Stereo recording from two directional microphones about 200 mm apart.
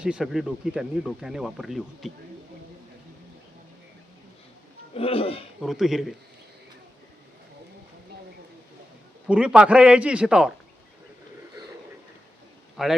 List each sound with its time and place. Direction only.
0.0 s speech: 5° right (ahead or behind)
4.9 s speech: 30° left (ahead or behind)
5.6 s speech: centre (ahead or behind)
9.2 s speech: 5° right (ahead or behind)
12.7 s a man's voice: centre (ahead or behind)